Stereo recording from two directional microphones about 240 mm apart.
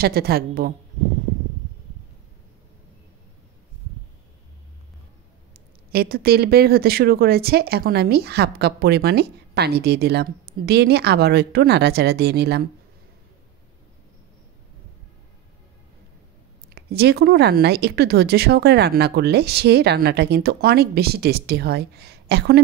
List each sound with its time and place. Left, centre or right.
0.0 s speech: right
5.5 s speech: right
16.7 s speech: right